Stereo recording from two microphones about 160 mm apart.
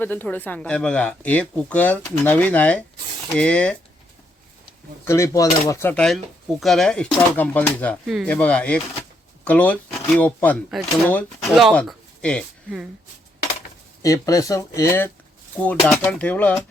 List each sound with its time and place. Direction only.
0.0 s speech: 10° left (ahead or behind)
5.0 s speech: 20° left (ahead or behind)
5.9 s speech: 5° left (ahead or behind)
14.0 s speech: 20° left (ahead or behind)
15.6 s speech: 5° left (ahead or behind)